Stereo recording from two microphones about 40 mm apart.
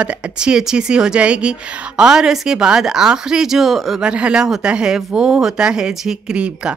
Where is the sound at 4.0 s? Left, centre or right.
Right.